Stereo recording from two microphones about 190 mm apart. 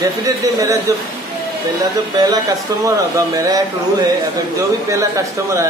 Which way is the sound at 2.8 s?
15° right (ahead or behind).